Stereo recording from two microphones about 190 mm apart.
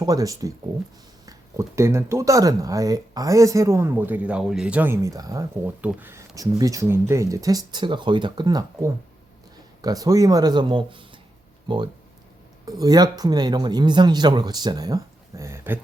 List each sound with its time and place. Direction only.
0.0 s speech: 20° right (ahead or behind)
12.8 s speech: 20° right (ahead or behind)